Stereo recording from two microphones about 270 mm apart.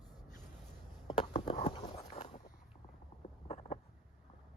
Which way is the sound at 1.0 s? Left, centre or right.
Centre.